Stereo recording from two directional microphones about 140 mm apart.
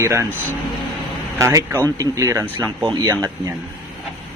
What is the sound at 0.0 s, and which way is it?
Speech, 20° right (ahead or behind).